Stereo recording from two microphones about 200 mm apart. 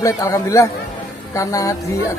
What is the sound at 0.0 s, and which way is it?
A man's voice, 15° left (ahead or behind).